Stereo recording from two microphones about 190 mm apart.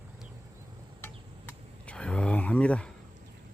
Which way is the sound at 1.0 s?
10° left (ahead or behind).